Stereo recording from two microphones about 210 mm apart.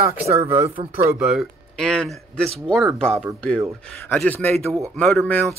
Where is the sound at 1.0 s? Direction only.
10° right (ahead or behind).